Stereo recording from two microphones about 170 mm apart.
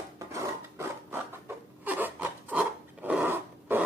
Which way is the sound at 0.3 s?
15° right (ahead or behind).